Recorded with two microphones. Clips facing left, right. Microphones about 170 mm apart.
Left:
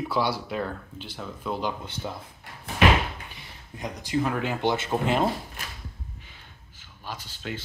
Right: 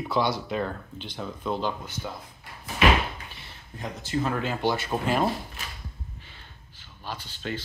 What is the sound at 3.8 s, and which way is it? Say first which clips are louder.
Speech: left 2 dB; 15° left (ahead or behind).